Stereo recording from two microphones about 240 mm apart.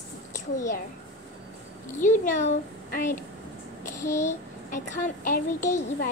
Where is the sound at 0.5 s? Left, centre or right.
Left.